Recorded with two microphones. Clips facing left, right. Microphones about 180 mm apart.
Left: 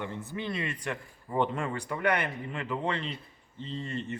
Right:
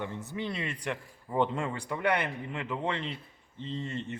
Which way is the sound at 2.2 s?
20° right (ahead or behind).